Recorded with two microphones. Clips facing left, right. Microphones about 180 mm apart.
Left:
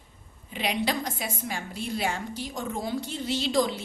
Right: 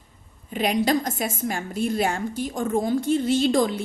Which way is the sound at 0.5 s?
45° right (ahead or behind).